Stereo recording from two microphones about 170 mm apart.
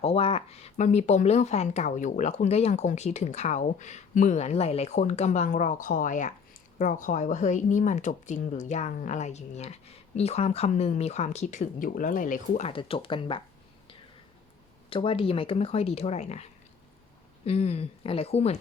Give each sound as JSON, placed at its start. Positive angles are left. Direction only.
{"t": 0.0, "sound": "speech", "side_deg": 35}
{"t": 14.8, "sound": "speech", "side_deg": 30}